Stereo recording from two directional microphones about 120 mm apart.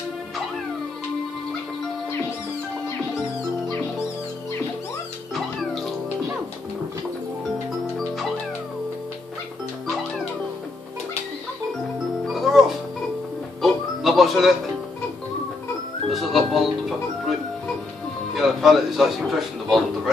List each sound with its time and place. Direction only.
5.3 s music: centre (ahead or behind)
12.3 s music: centre (ahead or behind)
16.1 s music: centre (ahead or behind)
18.3 s speech: centre (ahead or behind)